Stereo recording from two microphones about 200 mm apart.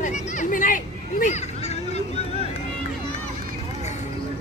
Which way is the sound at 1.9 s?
30° left (ahead or behind).